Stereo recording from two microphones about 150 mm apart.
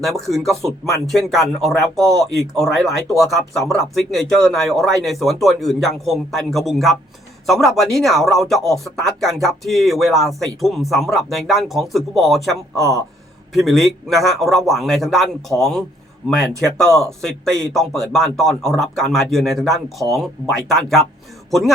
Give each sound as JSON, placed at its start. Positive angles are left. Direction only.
{"t": 0.0, "sound": "speech", "side_deg": 0}
{"t": 12.7, "sound": "speech", "side_deg": -20}
{"t": 13.7, "sound": "speech", "side_deg": 0}